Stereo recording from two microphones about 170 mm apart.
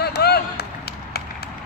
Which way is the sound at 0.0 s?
70° left (ahead or behind).